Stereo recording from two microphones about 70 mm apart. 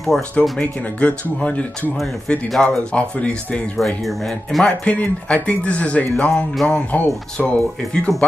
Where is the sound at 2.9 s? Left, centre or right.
Centre.